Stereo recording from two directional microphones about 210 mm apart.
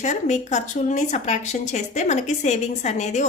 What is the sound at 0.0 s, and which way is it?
Speech, 35° left (ahead or behind).